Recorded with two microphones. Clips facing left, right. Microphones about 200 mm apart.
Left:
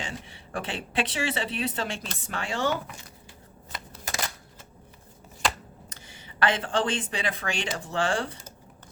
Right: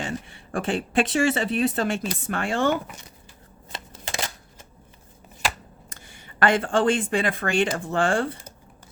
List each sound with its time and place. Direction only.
0.0 s speech: 50° right (ahead or behind)
3.7 s shuffling cards: 25° right (ahead or behind)
5.9 s speech: 50° right (ahead or behind)